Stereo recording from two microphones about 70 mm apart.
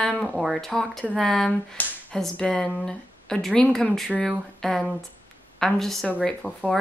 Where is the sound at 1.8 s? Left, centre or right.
Left.